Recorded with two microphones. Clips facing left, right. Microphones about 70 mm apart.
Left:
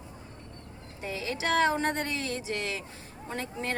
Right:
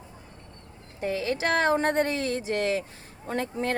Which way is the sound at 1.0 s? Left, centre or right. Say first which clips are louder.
Right 5 dB; right.